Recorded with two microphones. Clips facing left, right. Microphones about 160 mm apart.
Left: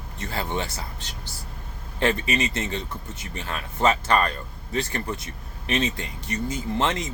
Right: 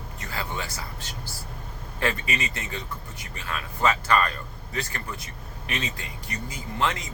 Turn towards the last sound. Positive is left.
turn(degrees=25)  # may be behind; listen again after turning